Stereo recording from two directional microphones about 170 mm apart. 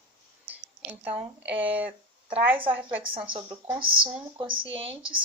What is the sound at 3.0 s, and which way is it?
Speech, 30° right (ahead or behind).